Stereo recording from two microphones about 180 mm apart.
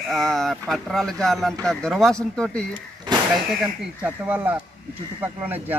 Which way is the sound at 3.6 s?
10° right (ahead or behind).